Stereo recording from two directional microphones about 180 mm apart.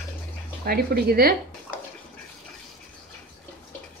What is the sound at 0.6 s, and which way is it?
Speech, 55° right (ahead or behind).